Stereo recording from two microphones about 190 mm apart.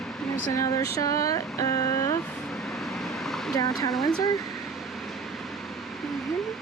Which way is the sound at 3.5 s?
20° left (ahead or behind).